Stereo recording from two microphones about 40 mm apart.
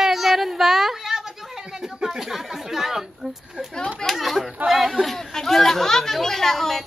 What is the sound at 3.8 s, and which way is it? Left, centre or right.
Speech, centre.